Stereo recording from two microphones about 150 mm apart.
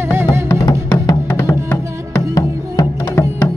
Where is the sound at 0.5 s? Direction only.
20° left (ahead or behind).